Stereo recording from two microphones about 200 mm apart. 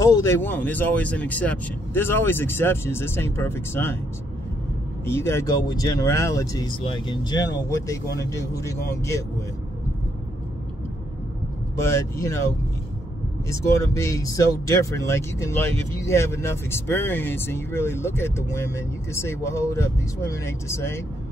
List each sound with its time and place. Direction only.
0.0 s speech: 15° left (ahead or behind)
5.0 s speech: 15° left (ahead or behind)
11.7 s speech: 15° left (ahead or behind)
13.5 s speech: 15° left (ahead or behind)